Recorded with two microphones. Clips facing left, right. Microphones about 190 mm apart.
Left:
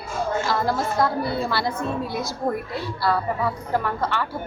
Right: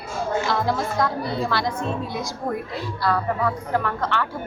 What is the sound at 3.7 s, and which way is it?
Speech, 10° left (ahead or behind).